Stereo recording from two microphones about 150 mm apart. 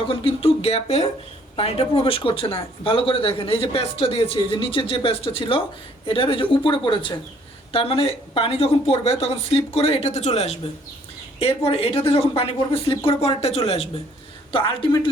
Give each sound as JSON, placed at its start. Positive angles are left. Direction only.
{"t": 0.1, "sound": "speech", "side_deg": 40}